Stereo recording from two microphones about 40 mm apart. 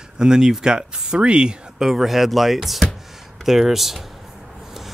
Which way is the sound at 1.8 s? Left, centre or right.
Centre.